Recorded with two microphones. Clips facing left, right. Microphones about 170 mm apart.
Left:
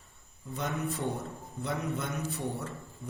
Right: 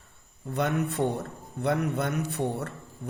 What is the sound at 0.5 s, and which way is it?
A man's voice, 65° right (ahead or behind).